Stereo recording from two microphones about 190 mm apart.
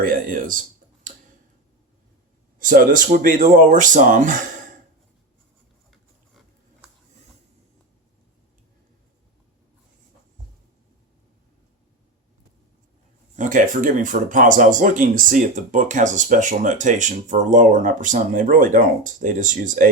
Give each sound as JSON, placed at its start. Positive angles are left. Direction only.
{"t": 0.0, "sound": "speech", "side_deg": -50}
{"t": 2.6, "sound": "speech", "side_deg": -45}
{"t": 13.3, "sound": "speech", "side_deg": -40}